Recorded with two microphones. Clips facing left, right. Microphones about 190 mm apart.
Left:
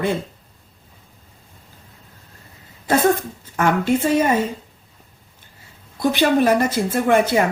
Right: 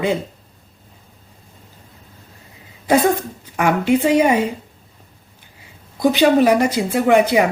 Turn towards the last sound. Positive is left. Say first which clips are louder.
# right 3 dB
turn(degrees=-15)  # may be behind; listen again after turning